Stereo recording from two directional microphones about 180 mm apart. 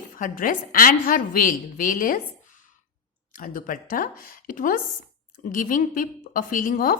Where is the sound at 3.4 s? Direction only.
50° left (ahead or behind).